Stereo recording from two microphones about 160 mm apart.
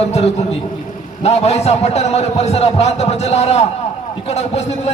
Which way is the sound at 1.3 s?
40° left (ahead or behind).